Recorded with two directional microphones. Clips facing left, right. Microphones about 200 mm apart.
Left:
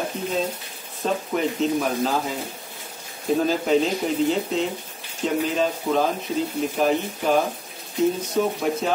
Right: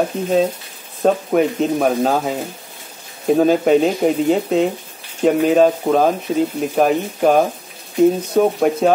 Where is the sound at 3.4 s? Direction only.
55° right (ahead or behind).